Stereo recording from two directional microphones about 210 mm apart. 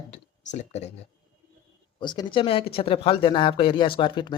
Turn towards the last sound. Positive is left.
turn(degrees=25)  # may be behind; listen again after turning